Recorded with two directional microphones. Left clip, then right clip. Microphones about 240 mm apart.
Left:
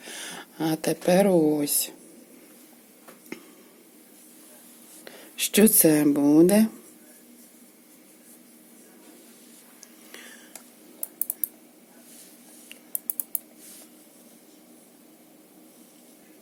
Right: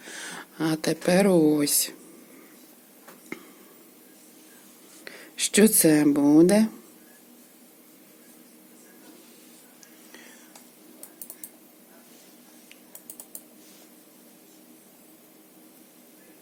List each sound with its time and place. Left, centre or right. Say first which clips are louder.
0.0 s speech: even; centre
5.0 s speech: even; centre
9.8 s whispering: left 3 dB; centre